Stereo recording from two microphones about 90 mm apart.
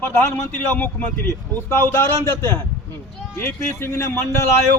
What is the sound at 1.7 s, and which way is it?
A man's voice, 25° left (ahead or behind).